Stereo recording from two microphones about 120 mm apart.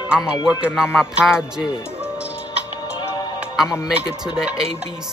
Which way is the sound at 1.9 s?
10° right (ahead or behind).